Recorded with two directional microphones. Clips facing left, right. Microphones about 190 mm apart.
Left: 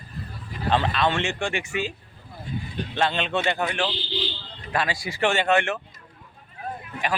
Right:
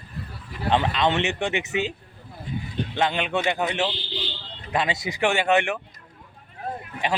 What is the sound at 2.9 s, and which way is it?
Speech, 15° right (ahead or behind).